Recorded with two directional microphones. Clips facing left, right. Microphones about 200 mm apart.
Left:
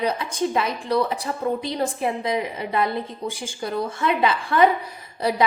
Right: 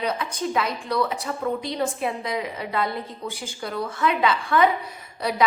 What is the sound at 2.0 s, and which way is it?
A woman's voice, 25° left (ahead or behind).